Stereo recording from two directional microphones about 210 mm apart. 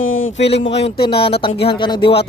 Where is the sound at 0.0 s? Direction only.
70° left (ahead or behind).